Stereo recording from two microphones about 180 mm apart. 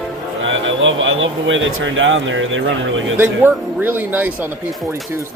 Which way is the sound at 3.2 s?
10° right (ahead or behind).